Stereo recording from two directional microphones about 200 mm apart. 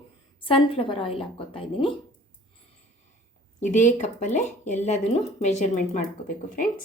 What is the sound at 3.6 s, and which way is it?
Speech, 40° left (ahead or behind).